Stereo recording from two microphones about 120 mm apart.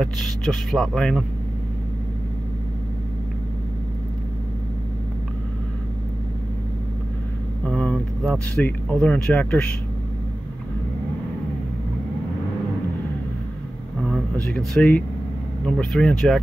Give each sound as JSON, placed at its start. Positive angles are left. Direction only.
{"t": 0.0, "sound": "speech", "side_deg": 5}
{"t": 7.6, "sound": "speech", "side_deg": 10}
{"t": 14.3, "sound": "speech", "side_deg": 10}